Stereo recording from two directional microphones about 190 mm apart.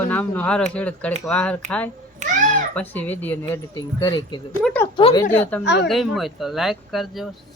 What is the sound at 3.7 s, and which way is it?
Speech, 20° left (ahead or behind).